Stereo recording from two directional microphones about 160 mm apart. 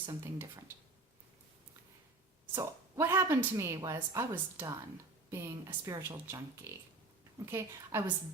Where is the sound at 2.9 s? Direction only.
15° right (ahead or behind).